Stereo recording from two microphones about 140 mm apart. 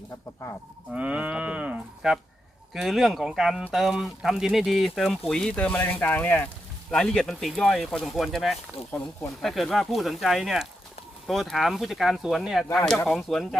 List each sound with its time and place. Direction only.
0.9 s livestock: 10° right (ahead or behind)
2.7 s speech: centre (ahead or behind)